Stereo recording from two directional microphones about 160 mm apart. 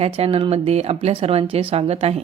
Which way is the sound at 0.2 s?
35° right (ahead or behind).